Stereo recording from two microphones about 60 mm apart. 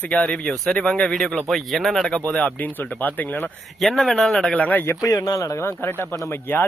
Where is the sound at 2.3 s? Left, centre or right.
Left.